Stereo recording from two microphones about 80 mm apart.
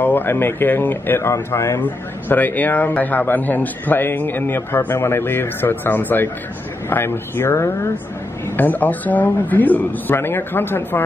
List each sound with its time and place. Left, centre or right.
0.0 s speech: left
1.8 s speech: left
8.5 s speech: left